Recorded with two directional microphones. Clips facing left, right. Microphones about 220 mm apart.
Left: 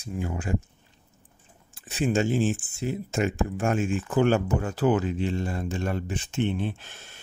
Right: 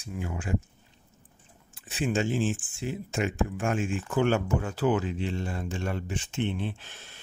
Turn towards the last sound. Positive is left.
turn(degrees=45)  # may be behind; listen again after turning